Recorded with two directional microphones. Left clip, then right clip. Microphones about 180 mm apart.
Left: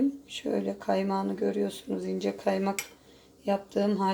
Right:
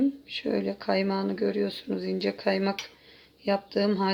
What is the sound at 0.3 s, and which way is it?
Speech, 15° right (ahead or behind).